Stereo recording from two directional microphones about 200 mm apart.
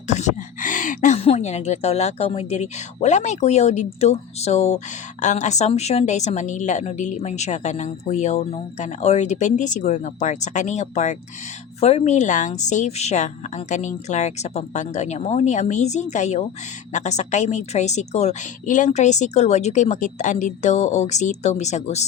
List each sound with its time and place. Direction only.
0.1 s speech: 35° left (ahead or behind)